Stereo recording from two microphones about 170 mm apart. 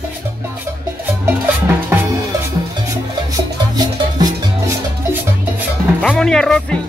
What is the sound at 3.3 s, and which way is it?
Music, 25° right (ahead or behind).